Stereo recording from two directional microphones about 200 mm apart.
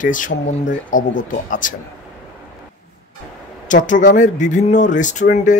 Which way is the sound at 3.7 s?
40° left (ahead or behind).